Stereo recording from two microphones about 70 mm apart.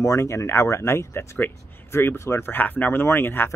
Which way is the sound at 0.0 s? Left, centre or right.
Left.